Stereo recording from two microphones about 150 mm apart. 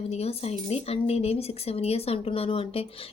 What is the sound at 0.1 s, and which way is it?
A woman's voice, 45° left (ahead or behind).